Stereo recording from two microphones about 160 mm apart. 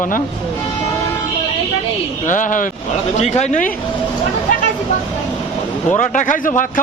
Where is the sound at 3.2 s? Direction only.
45° left (ahead or behind).